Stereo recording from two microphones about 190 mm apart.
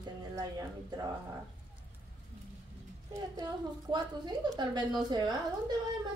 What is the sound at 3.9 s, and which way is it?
A woman's voice, 25° right (ahead or behind).